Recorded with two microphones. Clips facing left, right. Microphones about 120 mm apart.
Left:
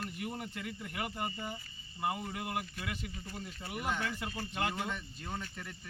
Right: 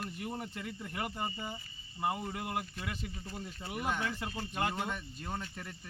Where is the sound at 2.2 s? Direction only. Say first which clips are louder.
Right 1 dB; 30° right (ahead or behind).